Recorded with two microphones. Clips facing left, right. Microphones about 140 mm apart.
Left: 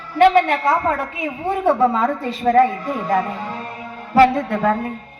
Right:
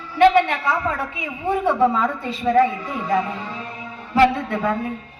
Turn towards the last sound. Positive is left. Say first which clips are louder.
# left 3 dB
turn(degrees=45)  # may be behind; listen again after turning